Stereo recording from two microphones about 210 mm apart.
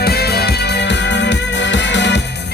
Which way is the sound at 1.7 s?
55° left (ahead or behind).